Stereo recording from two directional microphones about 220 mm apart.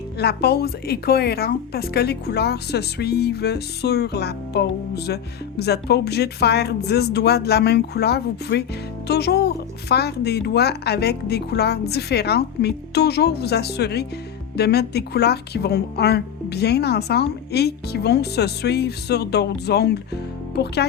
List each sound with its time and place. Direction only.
0.2 s speech: 50° left (ahead or behind)